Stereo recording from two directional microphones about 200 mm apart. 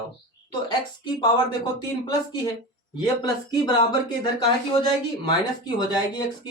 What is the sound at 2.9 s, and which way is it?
Speech, 20° left (ahead or behind).